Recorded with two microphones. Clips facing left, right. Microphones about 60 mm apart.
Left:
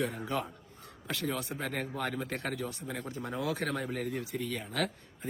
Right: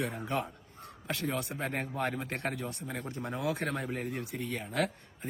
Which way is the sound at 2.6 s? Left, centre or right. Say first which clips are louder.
Left 1 dB; right.